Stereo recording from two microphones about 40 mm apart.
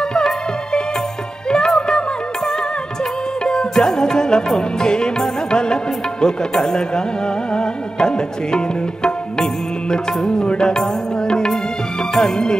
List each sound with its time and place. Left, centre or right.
1.5 s music: centre